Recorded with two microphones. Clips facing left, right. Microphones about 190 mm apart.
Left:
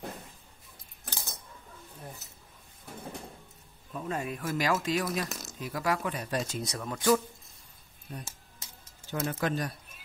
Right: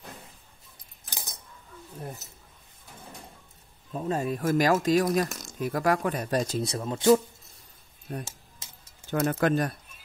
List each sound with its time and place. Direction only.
1.1 s keys jangling: 15° right (ahead or behind)
3.9 s speech: 30° right (ahead or behind)
5.3 s a sound: 5° left (ahead or behind)
5.6 s speech: 50° right (ahead or behind)
6.3 s speech: 35° right (ahead or behind)
8.1 s speech: 70° right (ahead or behind)
9.1 s speech: 55° right (ahead or behind)